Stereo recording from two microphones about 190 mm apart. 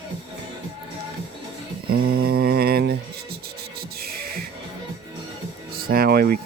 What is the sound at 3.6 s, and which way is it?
Music, 55° right (ahead or behind).